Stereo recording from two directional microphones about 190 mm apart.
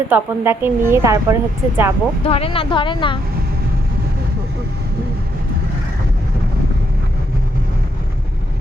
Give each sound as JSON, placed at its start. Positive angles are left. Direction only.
{"t": 0.1, "sound": "a woman's voice", "side_deg": -10}
{"t": 2.2, "sound": "speech", "side_deg": 30}